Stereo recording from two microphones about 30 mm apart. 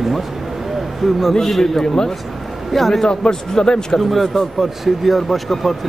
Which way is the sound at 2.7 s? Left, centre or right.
Centre.